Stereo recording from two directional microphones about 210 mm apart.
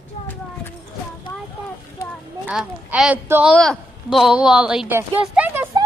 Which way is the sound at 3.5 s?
Centre (ahead or behind).